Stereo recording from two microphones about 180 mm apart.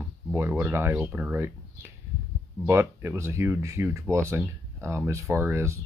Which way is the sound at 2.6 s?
15° right (ahead or behind).